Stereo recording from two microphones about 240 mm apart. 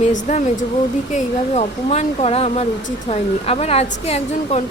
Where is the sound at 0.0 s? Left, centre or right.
Left.